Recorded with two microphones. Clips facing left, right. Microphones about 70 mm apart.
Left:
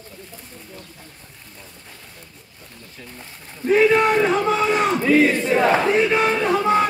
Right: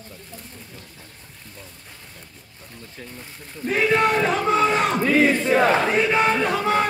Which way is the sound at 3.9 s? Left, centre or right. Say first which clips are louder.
Left 2 dB; centre.